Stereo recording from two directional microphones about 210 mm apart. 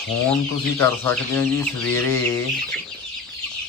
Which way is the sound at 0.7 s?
10° left (ahead or behind).